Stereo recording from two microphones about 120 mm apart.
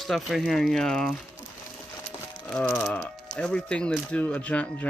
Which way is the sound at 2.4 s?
10° left (ahead or behind).